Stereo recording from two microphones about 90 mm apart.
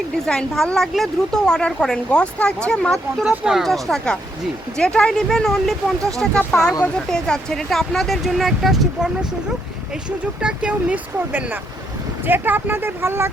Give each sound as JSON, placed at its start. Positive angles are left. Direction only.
{"t": 0.3, "sound": "a woman's voice", "side_deg": 5}
{"t": 3.2, "sound": "speech", "side_deg": -5}
{"t": 10.4, "sound": "speech", "side_deg": -10}